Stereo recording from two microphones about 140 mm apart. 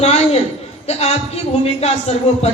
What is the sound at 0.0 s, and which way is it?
A woman's voice, 50° left (ahead or behind).